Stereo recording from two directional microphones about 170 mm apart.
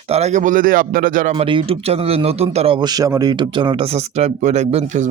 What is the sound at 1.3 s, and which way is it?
Speech, 35° right (ahead or behind).